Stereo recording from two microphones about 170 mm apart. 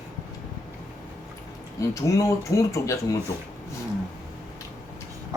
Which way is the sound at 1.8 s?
20° left (ahead or behind).